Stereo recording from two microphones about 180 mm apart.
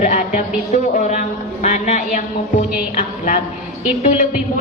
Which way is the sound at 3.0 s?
45° left (ahead or behind).